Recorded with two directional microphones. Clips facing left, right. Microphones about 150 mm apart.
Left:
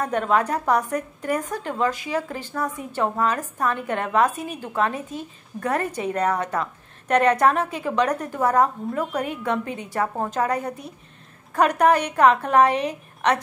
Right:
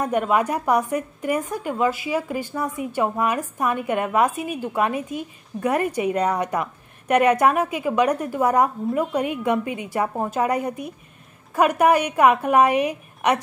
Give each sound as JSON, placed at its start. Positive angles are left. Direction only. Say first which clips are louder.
{"t": 0.0, "sound": "a woman's voice", "louder": "right 1 dB", "side_deg": -10}